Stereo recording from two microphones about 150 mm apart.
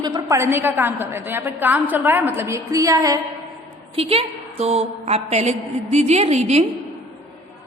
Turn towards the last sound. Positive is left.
turn(degrees=-45)  # may be behind; listen again after turning